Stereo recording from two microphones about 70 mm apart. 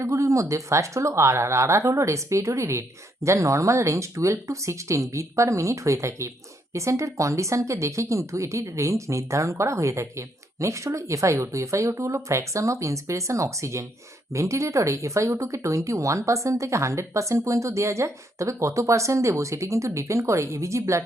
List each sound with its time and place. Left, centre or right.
0.0 s speech: right